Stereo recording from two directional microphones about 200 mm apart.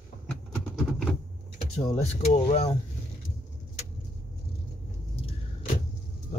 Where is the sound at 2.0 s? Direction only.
35° left (ahead or behind).